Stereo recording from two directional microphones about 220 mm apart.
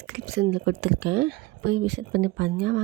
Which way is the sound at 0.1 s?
45° right (ahead or behind).